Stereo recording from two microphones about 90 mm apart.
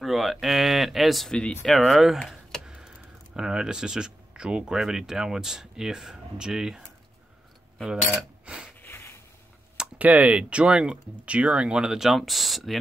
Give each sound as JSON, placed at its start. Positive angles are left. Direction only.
{"t": 0.0, "sound": "a sound", "side_deg": 0}
{"t": 1.3, "sound": "speech", "side_deg": 10}
{"t": 1.7, "sound": "speech", "side_deg": 0}
{"t": 8.2, "sound": "coin", "side_deg": -15}
{"t": 8.8, "sound": "a sound", "side_deg": 25}
{"t": 9.8, "sound": "speech", "side_deg": -15}